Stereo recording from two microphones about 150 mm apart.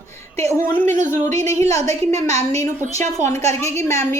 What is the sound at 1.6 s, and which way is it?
Speech, 20° left (ahead or behind).